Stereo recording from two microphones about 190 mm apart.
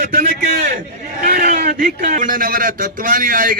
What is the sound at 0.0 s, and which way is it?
A man's voice, 45° right (ahead or behind).